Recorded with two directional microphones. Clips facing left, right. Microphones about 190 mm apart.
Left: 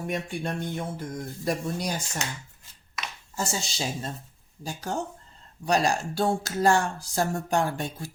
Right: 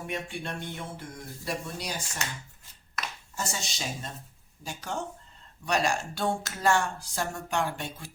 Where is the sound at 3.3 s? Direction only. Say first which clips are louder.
Left 5 dB; 30° left (ahead or behind).